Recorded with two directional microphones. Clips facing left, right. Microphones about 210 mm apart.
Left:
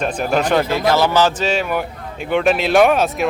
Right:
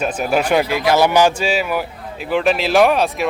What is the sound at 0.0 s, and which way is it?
Speech, 5° right (ahead or behind).